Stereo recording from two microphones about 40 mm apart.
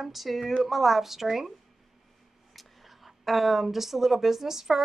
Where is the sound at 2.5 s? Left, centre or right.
Centre.